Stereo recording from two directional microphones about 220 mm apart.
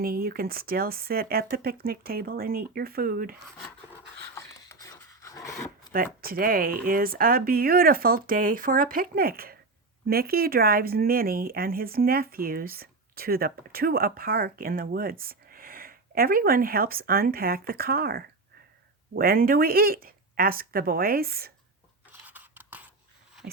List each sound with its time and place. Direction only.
0.0 s speech: 40° right (ahead or behind)
4.4 s a sound: 15° left (ahead or behind)
5.9 s speech: 40° right (ahead or behind)
22.1 s scissors: 10° right (ahead or behind)